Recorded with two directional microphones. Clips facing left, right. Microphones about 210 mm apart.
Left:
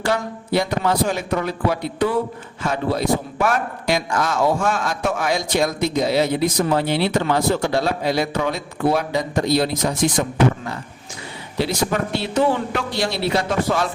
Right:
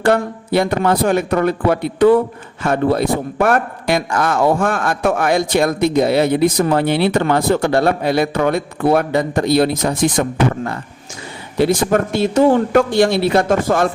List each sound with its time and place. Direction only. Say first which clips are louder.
0.0 s a man's voice: right 7 dB; 55° right (ahead or behind)